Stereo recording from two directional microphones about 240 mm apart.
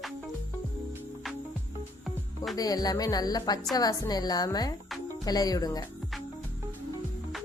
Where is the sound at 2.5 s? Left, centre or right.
Centre.